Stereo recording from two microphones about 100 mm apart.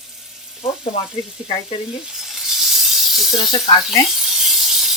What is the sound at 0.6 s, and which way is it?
Speech, 65° left (ahead or behind).